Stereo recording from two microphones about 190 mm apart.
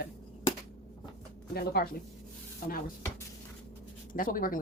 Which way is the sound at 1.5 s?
55° left (ahead or behind).